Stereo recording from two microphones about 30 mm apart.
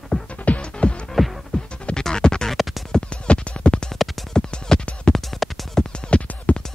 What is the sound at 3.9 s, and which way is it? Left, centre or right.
Music, centre.